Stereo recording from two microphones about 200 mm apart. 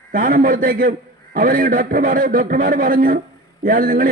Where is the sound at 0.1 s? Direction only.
45° right (ahead or behind).